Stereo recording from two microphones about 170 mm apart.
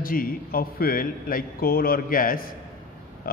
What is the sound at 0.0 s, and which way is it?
Speech, 60° left (ahead or behind).